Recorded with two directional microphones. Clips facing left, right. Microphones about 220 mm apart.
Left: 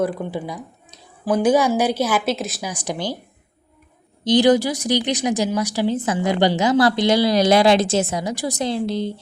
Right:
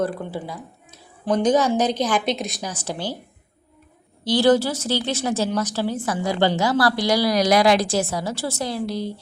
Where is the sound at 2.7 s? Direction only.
15° left (ahead or behind).